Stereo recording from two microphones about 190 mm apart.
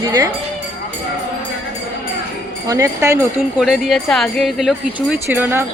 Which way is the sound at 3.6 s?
Centre (ahead or behind).